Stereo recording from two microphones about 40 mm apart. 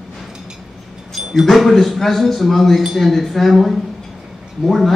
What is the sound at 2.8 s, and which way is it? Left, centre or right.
Speech, centre.